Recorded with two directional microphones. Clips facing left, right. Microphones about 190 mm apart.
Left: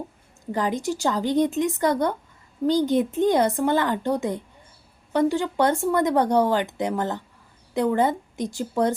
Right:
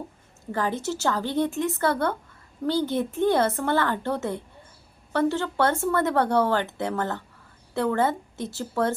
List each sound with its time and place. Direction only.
0.5 s speech: 15° left (ahead or behind)